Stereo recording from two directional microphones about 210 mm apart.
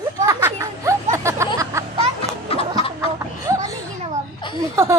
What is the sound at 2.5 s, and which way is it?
Chicken, 25° left (ahead or behind).